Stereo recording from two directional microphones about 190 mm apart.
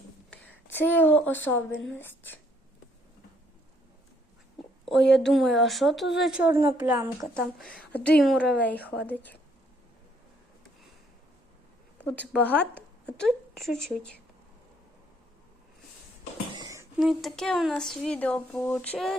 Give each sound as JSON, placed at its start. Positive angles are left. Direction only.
{"t": 0.3, "sound": "speech", "side_deg": 10}
{"t": 4.9, "sound": "speech", "side_deg": 0}
{"t": 7.3, "sound": "a woman's voice", "side_deg": 5}
{"t": 12.3, "sound": "a woman's voice", "side_deg": 5}
{"t": 16.5, "sound": "a sound", "side_deg": -20}
{"t": 17.0, "sound": "speech", "side_deg": 0}